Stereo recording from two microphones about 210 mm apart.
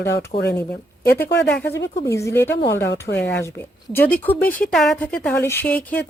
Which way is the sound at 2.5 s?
50° left (ahead or behind).